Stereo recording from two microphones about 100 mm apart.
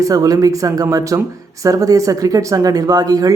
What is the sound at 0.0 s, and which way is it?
Speech, 35° right (ahead or behind).